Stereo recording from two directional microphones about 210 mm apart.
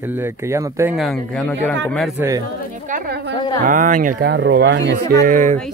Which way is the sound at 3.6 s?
40° right (ahead or behind).